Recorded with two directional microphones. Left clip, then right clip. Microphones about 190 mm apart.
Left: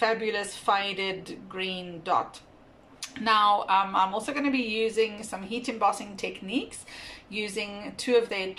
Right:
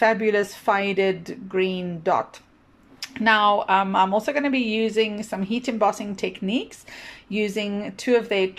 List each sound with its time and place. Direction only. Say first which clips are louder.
0.0 s speech: right 7 dB; 40° right (ahead or behind)